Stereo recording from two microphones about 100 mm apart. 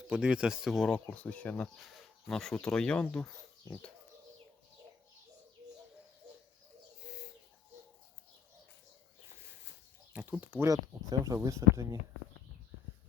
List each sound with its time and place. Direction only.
0.1 s speech: 10° right (ahead or behind)
0.8 s speech: 10° left (ahead or behind)
1.8 s speech: centre (ahead or behind); by 3.9 s 15° left (ahead or behind)
10.1 s speech: 15° right (ahead or behind)
10.6 s speech: 35° right (ahead or behind)